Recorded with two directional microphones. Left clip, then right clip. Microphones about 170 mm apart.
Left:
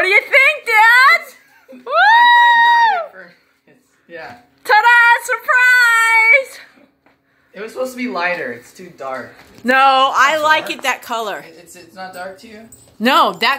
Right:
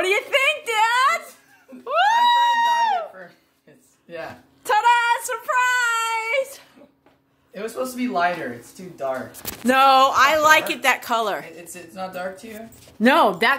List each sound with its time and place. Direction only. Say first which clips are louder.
0.0 s a sound: left 8 dB; 5° left (ahead or behind)
1.9 s music: left 8 dB; 5° left (ahead or behind)
4.6 s child singing: left 8 dB; 10° left (ahead or behind)
7.5 s a woman's voice: left 4 dB; 10° right (ahead or behind)
9.7 s a woman's voice: left 3 dB; 5° right (ahead or behind)
11.7 s speech: left 1 dB; 70° right (ahead or behind)
13.0 s a woman's voice: left 3 dB; centre (ahead or behind)